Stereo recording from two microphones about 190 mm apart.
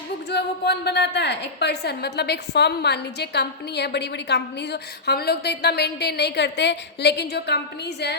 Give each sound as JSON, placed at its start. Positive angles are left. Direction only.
{"t": 0.3, "sound": "a woman's voice", "side_deg": 60}